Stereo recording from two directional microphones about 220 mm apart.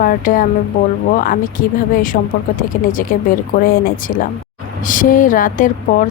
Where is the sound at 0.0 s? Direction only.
40° left (ahead or behind).